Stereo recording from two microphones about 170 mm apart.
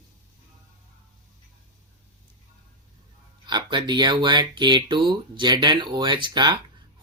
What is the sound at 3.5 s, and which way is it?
Speech, 25° right (ahead or behind).